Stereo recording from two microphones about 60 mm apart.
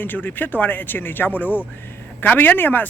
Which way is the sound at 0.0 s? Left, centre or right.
Left.